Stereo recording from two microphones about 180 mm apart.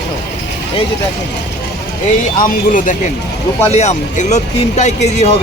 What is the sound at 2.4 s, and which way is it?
Speech, 45° left (ahead or behind).